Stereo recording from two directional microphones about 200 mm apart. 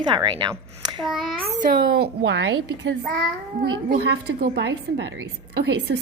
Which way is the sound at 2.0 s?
65° right (ahead or behind).